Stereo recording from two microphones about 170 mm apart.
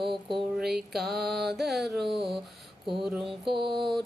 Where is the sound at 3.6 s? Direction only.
Centre (ahead or behind).